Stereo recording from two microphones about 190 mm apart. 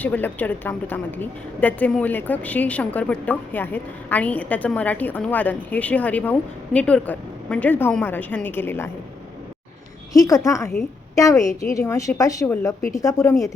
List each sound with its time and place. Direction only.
0.0 s a woman's voice: 10° left (ahead or behind)
10.1 s a woman's voice: 15° left (ahead or behind)